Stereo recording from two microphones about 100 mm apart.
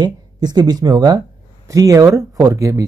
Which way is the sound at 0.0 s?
45° right (ahead or behind).